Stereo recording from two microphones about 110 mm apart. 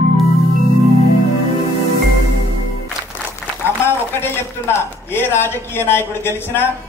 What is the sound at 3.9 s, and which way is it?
Speech, 20° left (ahead or behind).